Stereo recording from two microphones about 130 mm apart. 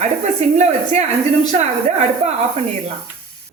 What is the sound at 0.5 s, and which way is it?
A woman's voice, 60° right (ahead or behind).